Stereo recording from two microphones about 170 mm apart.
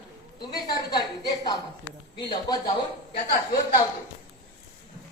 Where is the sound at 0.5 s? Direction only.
25° left (ahead or behind).